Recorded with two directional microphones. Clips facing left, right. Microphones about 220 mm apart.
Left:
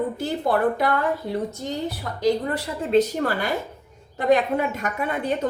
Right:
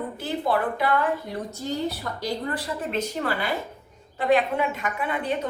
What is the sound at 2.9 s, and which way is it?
A woman's voice, 40° left (ahead or behind).